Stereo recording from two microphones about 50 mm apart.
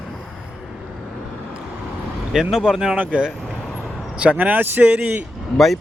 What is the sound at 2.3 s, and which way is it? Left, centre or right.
Speech, centre.